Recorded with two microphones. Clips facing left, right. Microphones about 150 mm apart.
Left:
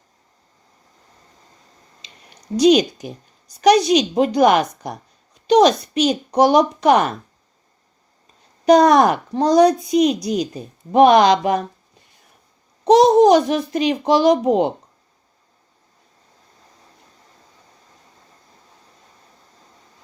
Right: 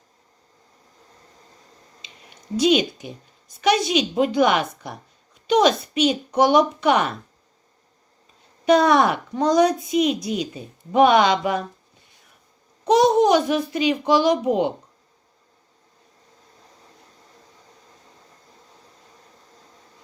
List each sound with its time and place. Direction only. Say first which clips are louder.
2.6 s a woman's voice: left 5 dB; 40° left (ahead or behind)
8.6 s a woman's voice: left 4 dB; 40° left (ahead or behind)
12.8 s a woman's voice: left 5 dB; 35° left (ahead or behind)